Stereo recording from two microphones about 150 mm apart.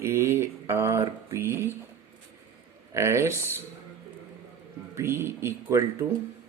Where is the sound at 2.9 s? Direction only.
20° right (ahead or behind).